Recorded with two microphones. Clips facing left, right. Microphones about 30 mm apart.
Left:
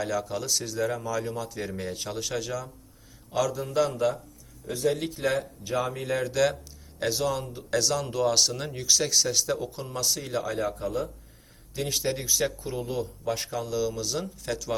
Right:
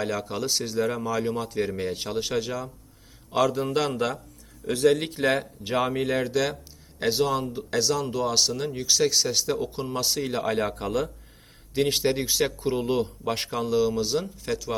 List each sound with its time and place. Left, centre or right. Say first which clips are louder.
0.0 s speech: right 1 dB; right
1.6 s speech: right 4 dB; right
3.3 s a man's voice: right 2 dB; right
4.6 s speech: right 6 dB; right
4.9 s speech: right 3 dB; right
6.1 s speech: right 2 dB; right
6.3 s speech: left 1 dB; centre
10.4 s speech: right 3 dB; right
11.7 s a man's voice: right 7 dB; right
12.0 s speech: right 3 dB; right
12.8 s speech: right 5 dB; right
13.2 s speech: right 3 dB; right
14.2 s speech: right 3 dB; centre